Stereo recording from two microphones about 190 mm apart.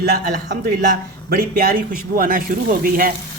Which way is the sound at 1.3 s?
50° right (ahead or behind).